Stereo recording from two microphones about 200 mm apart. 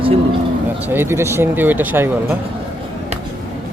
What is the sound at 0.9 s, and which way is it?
Speech, 10° right (ahead or behind).